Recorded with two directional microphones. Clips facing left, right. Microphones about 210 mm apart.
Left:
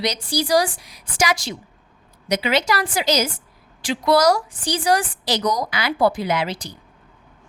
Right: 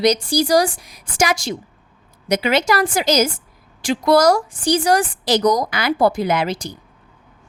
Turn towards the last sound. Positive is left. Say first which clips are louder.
# right 3 dB
turn(degrees=-45)  # may be behind; listen again after turning